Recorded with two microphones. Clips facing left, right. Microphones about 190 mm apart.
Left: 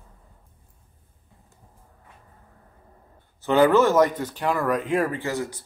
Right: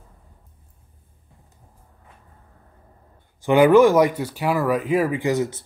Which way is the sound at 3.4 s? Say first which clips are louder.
Right 4 dB; 15° right (ahead or behind).